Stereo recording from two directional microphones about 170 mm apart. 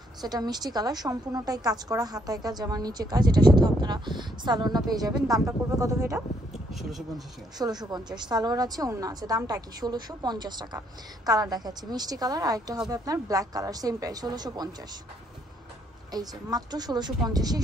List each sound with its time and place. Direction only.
0.2 s a woman's voice: 25° right (ahead or behind)
6.7 s speech: centre (ahead or behind)
7.5 s a woman's voice: 25° right (ahead or behind)
16.1 s a woman's voice: 25° right (ahead or behind)